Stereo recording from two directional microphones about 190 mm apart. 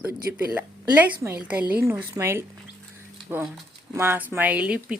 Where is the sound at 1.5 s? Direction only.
5° right (ahead or behind).